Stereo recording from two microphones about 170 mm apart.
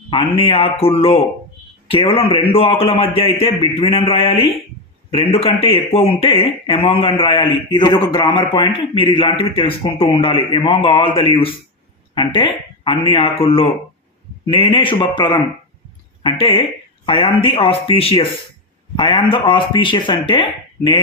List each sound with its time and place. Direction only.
0.1 s a man's voice: 35° left (ahead or behind)
16.4 s a man's voice: 30° left (ahead or behind)